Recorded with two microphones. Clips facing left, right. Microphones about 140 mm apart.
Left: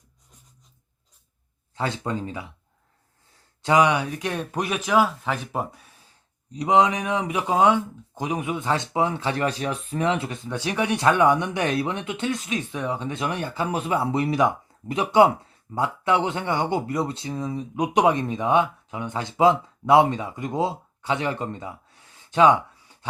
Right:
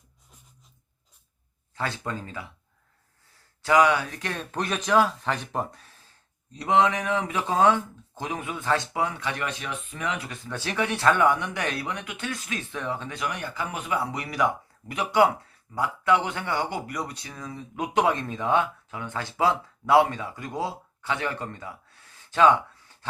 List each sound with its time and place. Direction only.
1.7 s speech: 20° left (ahead or behind)
3.6 s speech: 20° left (ahead or behind)